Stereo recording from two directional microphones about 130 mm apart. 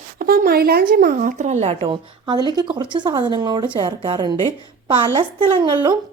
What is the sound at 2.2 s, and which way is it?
A woman's voice, 35° right (ahead or behind).